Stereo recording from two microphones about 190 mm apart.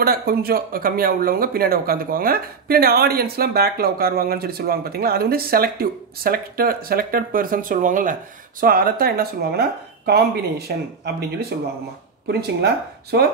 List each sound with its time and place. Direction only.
0.0 s speech: 55° right (ahead or behind)